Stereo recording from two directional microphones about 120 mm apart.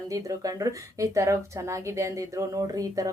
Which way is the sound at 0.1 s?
30° right (ahead or behind).